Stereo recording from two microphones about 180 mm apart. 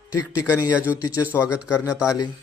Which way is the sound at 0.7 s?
10° right (ahead or behind).